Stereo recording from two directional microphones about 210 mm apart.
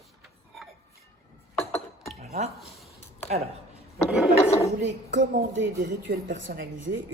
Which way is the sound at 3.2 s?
30° right (ahead or behind).